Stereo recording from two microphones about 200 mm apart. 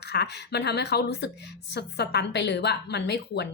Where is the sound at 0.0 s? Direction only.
55° left (ahead or behind).